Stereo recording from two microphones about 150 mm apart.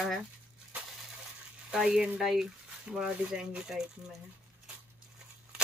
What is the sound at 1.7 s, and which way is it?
Speech, 5° right (ahead or behind).